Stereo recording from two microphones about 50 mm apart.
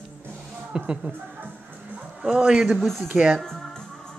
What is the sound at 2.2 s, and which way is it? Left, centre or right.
Speech, centre.